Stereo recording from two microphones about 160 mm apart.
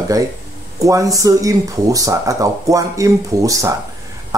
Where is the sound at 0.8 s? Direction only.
20° right (ahead or behind).